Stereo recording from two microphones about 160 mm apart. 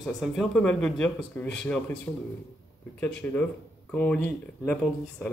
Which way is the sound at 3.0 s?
10° left (ahead or behind).